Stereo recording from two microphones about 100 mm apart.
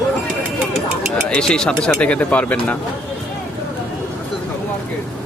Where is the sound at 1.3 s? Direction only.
10° left (ahead or behind).